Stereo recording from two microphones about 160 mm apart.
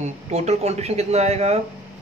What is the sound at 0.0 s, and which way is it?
Speech, 45° right (ahead or behind).